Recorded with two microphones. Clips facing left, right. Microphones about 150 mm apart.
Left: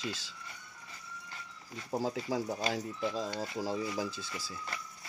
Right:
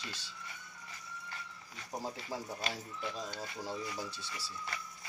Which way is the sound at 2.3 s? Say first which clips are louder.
Left 7 dB; 90° left.